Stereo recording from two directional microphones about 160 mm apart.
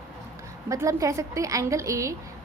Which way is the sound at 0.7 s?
20° right (ahead or behind).